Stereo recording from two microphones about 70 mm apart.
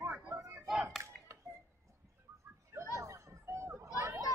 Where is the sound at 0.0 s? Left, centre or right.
Right.